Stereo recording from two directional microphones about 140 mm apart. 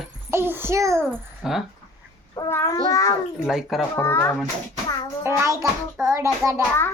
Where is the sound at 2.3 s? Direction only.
20° left (ahead or behind).